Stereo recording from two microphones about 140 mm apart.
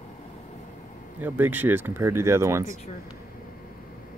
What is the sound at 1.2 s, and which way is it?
Speech, 15° right (ahead or behind).